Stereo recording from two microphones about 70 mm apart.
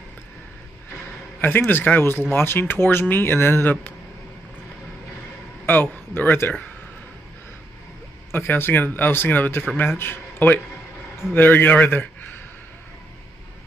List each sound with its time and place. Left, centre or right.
1.7 s speech: left
5.7 s speech: left
8.3 s a man's voice: left